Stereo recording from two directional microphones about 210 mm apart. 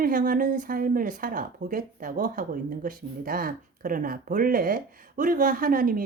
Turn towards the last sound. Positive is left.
turn(degrees=-45)  # may be behind; listen again after turning